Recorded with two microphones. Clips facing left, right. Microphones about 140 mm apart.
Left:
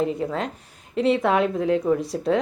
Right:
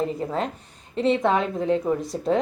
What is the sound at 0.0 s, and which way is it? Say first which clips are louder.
A woman's voice: left 1 dB; centre (ahead or behind).